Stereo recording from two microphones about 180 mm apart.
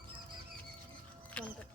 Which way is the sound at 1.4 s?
5° left (ahead or behind).